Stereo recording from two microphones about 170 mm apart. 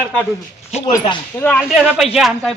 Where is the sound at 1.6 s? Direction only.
5° right (ahead or behind).